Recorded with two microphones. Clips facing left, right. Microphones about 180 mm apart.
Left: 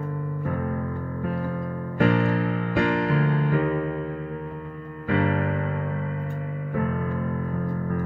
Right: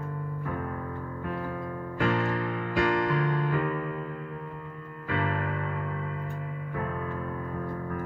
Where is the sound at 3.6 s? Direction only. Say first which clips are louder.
Left 6 dB; 45° left (ahead or behind).